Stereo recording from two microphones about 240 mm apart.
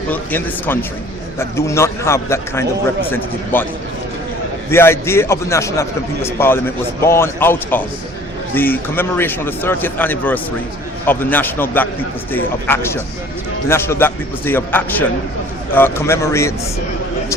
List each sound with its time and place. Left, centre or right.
0.1 s a man's voice: centre
4.7 s a man's voice: centre